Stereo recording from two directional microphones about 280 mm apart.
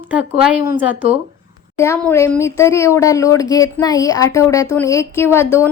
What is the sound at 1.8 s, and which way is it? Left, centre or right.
A woman's voice, centre.